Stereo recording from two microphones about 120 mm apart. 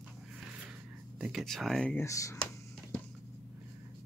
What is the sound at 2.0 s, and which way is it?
Speech, 25° left (ahead or behind).